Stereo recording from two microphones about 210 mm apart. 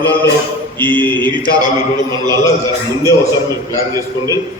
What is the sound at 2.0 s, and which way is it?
Speech, 20° right (ahead or behind).